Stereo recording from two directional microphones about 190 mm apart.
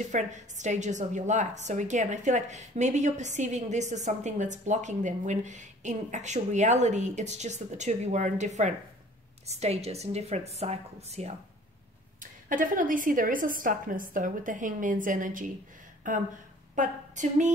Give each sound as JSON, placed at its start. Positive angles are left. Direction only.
{"t": 0.1, "sound": "a woman's voice", "side_deg": -40}